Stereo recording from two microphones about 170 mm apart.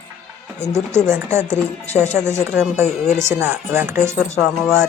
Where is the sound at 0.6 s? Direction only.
15° right (ahead or behind).